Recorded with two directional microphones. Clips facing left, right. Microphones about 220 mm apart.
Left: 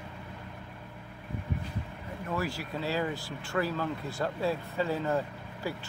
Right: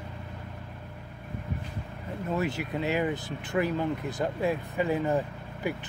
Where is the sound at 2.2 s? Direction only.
20° right (ahead or behind).